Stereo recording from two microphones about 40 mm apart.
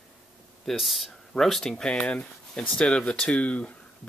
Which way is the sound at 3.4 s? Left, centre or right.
Left.